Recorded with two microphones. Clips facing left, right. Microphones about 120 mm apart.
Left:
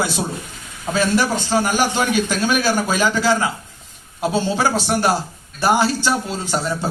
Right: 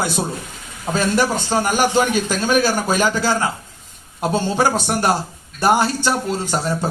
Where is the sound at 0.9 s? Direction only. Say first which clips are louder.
Even; 45° right (ahead or behind).